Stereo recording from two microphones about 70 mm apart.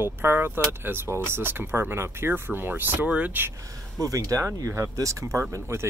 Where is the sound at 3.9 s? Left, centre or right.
Right.